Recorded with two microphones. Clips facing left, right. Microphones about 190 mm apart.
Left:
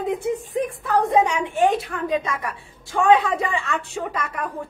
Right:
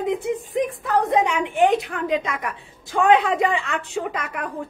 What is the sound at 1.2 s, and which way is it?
A woman's voice, 15° right (ahead or behind).